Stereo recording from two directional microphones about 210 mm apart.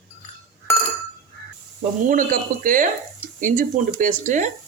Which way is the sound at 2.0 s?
40° right (ahead or behind).